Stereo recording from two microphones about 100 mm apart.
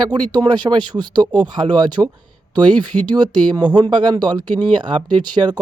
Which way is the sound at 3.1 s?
45° right (ahead or behind).